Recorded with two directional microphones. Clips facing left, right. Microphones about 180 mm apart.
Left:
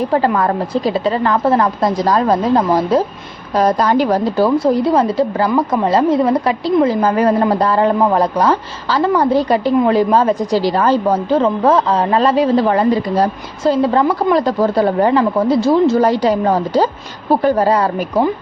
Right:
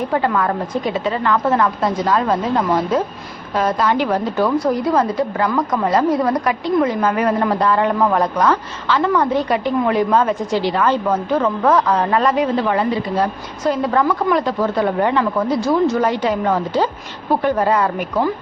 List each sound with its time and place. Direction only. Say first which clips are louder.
0.3 s a woman's voice: left 3 dB; 35° left (ahead or behind)